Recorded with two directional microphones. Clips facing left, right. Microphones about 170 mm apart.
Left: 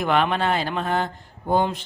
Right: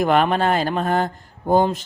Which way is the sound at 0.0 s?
40° right (ahead or behind).